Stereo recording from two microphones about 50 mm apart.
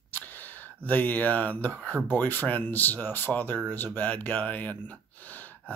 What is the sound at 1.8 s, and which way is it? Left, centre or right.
Speech, left.